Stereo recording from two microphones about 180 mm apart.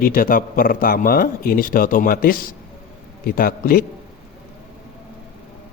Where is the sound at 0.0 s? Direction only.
50° left (ahead or behind).